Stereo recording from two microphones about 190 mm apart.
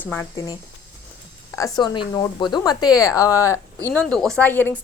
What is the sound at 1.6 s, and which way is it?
Speech, 20° left (ahead or behind).